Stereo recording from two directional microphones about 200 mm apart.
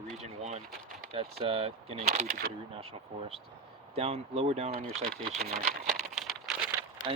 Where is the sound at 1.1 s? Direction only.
30° right (ahead or behind).